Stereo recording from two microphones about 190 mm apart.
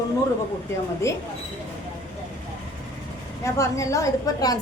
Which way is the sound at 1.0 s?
15° left (ahead or behind).